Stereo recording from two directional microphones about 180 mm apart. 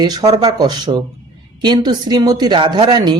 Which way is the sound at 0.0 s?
25° right (ahead or behind).